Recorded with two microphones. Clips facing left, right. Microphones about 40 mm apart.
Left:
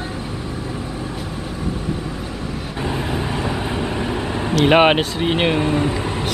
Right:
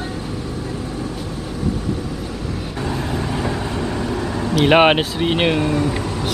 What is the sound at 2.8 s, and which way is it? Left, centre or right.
Vehicle, left.